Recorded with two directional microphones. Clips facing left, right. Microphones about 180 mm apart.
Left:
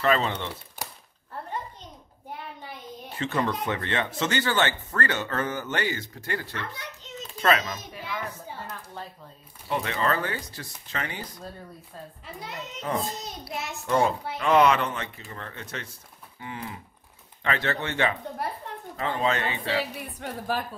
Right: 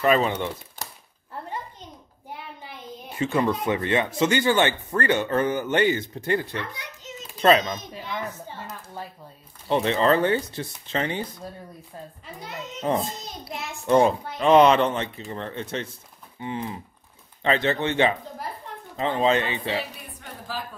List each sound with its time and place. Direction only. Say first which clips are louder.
0.0 s speech: right 4 dB; 15° right (ahead or behind)
0.8 s a sound: left 4 dB; 10° left (ahead or behind)
3.2 s speech: right 4 dB; 10° right (ahead or behind)
9.7 s speech: right 7 dB; 25° right (ahead or behind)
12.9 s speech: right 5 dB; 25° right (ahead or behind)
13.5 s a child's voice: even; centre (ahead or behind)
13.8 s speech: right 5 dB; 20° right (ahead or behind)
18.4 s a woman's voice: left 4 dB; 65° left (ahead or behind)
18.9 s speech: right 5 dB; 20° right (ahead or behind)
20.2 s a woman's voice: left 5 dB; 60° left (ahead or behind)